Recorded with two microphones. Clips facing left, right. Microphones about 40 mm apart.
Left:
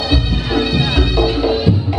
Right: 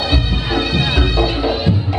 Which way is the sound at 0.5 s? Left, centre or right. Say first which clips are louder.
Left 1 dB; centre.